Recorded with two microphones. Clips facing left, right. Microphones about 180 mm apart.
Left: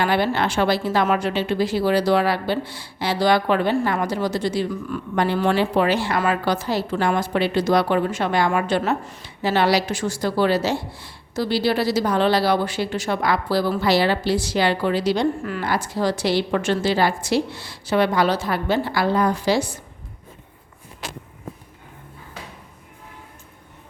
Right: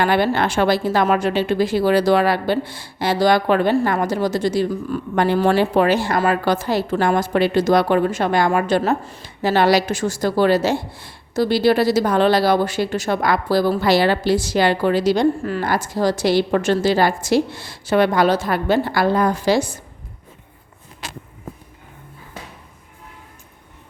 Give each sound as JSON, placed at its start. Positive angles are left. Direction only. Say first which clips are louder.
{"t": 0.0, "sound": "speech", "louder": "right 3 dB", "side_deg": -50}
{"t": 9.2, "sound": "speech", "louder": "right 3 dB", "side_deg": -45}